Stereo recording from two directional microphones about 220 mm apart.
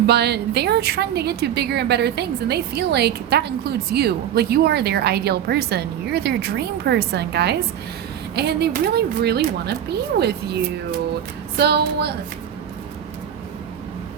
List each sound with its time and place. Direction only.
0.1 s a woman's voice: 50° right (ahead or behind)